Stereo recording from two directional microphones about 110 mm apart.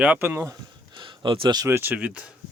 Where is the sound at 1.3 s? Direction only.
45° right (ahead or behind).